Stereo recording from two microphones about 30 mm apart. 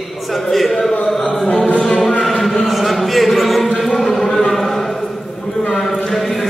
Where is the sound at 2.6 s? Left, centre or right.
Centre.